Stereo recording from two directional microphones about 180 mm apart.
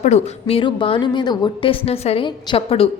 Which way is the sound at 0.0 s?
35° left (ahead or behind).